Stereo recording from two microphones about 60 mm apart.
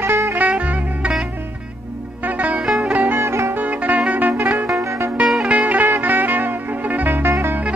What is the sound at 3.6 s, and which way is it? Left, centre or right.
Music, right.